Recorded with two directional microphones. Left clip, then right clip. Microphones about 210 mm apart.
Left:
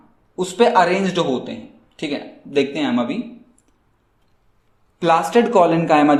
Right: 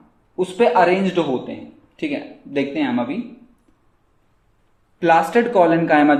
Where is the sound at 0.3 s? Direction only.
30° left (ahead or behind).